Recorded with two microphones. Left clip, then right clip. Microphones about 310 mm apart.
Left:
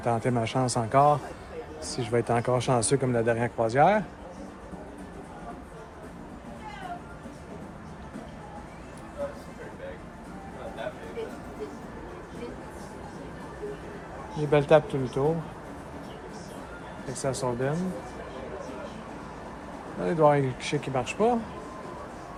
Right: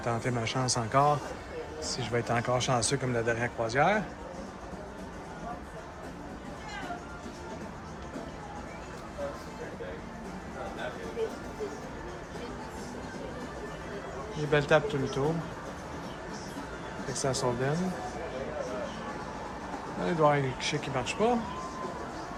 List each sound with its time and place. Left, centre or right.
0.0 s speech: centre
14.5 s speech: centre
17.2 s speech: centre
20.1 s speech: centre